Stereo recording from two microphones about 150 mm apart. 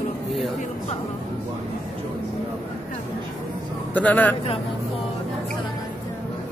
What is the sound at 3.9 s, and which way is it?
Speech, 10° left (ahead or behind).